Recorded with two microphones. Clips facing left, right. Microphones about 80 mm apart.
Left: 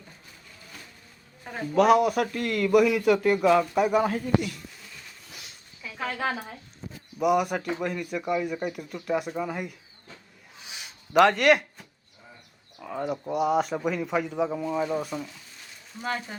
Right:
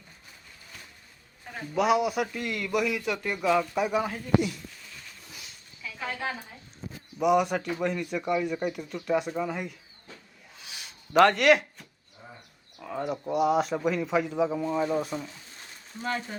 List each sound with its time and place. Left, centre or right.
1.7 s a man's voice: centre
6.0 s a woman's voice: left
7.2 s a man's voice: centre
11.1 s a man's voice: centre
12.8 s a man's voice: centre